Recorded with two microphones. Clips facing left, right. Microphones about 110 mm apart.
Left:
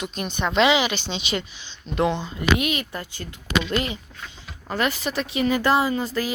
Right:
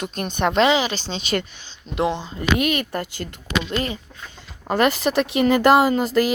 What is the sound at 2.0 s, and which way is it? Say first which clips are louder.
Speech: even; 25° right (ahead or behind).